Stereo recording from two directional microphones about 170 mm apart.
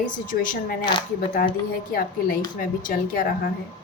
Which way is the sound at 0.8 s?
25° left (ahead or behind).